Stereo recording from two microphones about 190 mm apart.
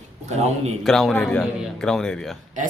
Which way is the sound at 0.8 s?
Centre (ahead or behind).